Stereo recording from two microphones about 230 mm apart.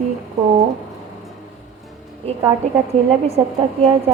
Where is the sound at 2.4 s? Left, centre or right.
Centre.